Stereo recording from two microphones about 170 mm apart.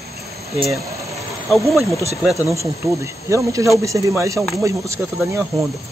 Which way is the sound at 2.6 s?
15° right (ahead or behind).